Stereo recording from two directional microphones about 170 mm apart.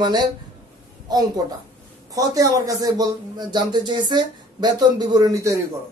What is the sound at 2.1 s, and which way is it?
A woman's voice, 20° right (ahead or behind).